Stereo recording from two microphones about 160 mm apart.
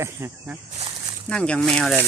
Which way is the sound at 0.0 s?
15° right (ahead or behind).